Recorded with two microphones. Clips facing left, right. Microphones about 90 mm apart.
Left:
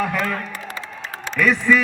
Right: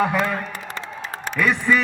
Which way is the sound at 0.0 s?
20° right (ahead or behind).